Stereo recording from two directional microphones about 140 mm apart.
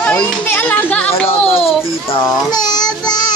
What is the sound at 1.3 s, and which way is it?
Speech, 45° left (ahead or behind).